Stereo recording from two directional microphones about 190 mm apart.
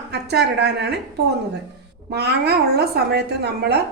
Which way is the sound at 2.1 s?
60° right (ahead or behind).